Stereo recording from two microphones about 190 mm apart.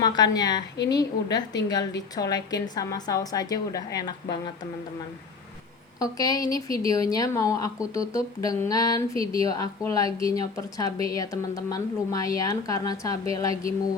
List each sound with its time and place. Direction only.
0.0 s a woman's voice: 20° left (ahead or behind)
6.0 s speech: 20° left (ahead or behind)